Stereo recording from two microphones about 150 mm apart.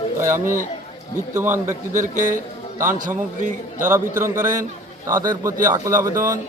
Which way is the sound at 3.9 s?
15° right (ahead or behind).